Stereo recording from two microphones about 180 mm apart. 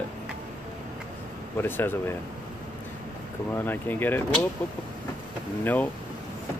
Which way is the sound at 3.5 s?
10° left (ahead or behind).